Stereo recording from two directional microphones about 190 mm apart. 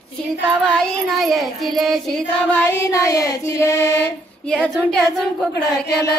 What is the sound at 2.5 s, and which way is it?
Music, 15° left (ahead or behind).